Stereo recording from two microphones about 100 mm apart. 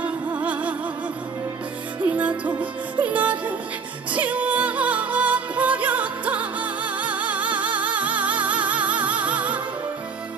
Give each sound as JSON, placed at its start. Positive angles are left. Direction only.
{"t": 0.0, "sound": "music", "side_deg": -15}
{"t": 2.0, "sound": "music", "side_deg": -15}